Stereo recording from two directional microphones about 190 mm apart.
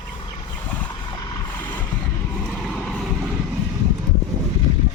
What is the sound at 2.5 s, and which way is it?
Vehicle, 5° left (ahead or behind).